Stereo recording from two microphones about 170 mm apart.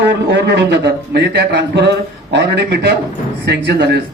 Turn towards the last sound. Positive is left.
turn(degrees=-75)  # may be behind; listen again after turning